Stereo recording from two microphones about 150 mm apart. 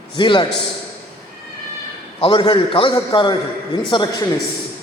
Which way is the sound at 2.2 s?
30° left (ahead or behind).